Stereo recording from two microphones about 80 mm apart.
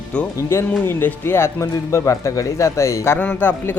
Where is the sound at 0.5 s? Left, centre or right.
Left.